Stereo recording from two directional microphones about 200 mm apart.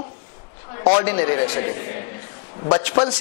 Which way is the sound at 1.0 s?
10° left (ahead or behind).